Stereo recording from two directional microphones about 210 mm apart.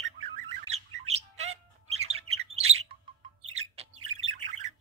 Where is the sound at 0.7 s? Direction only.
30° right (ahead or behind).